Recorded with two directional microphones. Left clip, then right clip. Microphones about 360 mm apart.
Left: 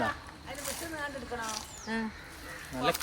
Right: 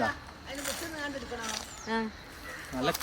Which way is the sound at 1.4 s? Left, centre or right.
Right.